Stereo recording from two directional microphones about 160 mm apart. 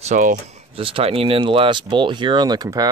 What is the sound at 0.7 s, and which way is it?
Speech, 35° right (ahead or behind).